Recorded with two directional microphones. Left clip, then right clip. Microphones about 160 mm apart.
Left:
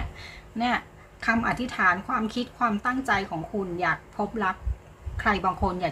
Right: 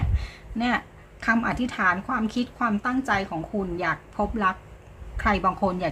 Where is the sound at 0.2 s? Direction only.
15° right (ahead or behind).